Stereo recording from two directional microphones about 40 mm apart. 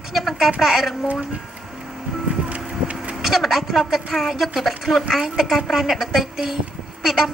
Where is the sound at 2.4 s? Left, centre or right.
Right.